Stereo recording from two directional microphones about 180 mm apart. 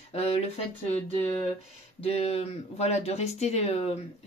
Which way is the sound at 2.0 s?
35° left (ahead or behind).